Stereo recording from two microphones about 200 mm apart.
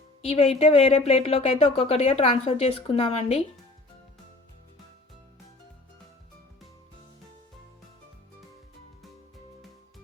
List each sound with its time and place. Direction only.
0.2 s speech: 30° left (ahead or behind)